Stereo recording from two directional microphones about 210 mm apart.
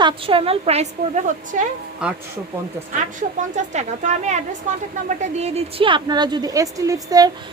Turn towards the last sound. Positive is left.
turn(degrees=-15)  # may be behind; listen again after turning